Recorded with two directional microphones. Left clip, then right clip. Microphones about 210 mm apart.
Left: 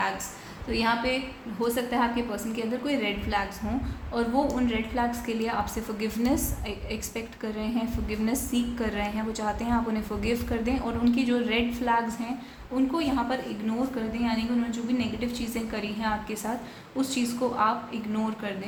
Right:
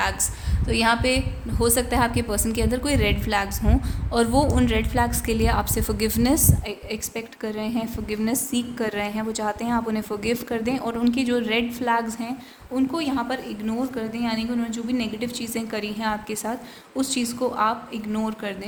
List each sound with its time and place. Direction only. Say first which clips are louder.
0.7 s a woman's voice: right 5 dB; 50° right (ahead or behind)